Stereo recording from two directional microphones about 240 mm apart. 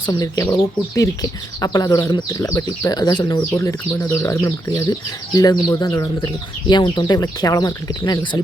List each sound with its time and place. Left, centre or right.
0.0 s speech: centre